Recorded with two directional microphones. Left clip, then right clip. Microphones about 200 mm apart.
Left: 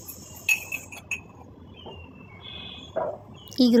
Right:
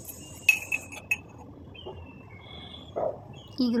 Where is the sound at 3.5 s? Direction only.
25° left (ahead or behind).